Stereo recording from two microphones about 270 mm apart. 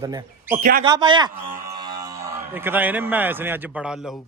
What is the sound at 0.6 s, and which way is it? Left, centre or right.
Speech, right.